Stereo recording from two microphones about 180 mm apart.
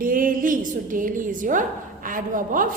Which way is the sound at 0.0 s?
50° right (ahead or behind).